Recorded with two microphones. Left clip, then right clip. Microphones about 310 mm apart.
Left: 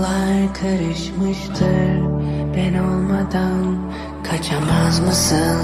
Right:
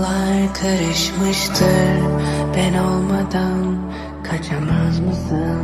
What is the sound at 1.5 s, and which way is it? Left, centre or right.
Music, right.